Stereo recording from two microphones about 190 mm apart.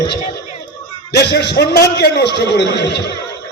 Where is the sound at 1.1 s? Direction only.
60° left (ahead or behind).